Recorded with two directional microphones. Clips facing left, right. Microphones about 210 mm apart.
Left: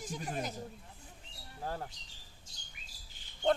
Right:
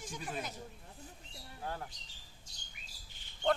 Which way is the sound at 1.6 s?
35° left (ahead or behind).